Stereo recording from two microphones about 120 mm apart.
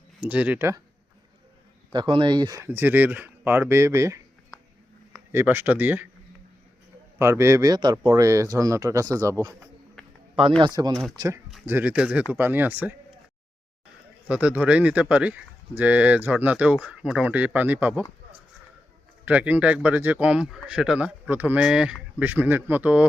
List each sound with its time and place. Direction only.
0.2 s speech: 15° right (ahead or behind)
1.9 s speech: 40° right (ahead or behind)
2.6 s speech: 15° right (ahead or behind)
5.3 s speech: 20° right (ahead or behind)
7.2 s speech: 25° right (ahead or behind)
9.6 s bee: centre (ahead or behind)
10.9 s speech: centre (ahead or behind)
11.6 s speech: 15° right (ahead or behind)
14.3 s speech: 10° right (ahead or behind)
19.2 s speech: 15° right (ahead or behind)